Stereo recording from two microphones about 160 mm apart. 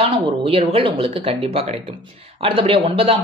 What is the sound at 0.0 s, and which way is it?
Speech, 35° right (ahead or behind).